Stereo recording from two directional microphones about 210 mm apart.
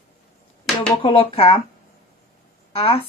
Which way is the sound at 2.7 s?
25° left (ahead or behind).